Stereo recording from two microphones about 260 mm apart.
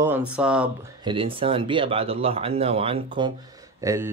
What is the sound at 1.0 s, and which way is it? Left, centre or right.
Speech, centre.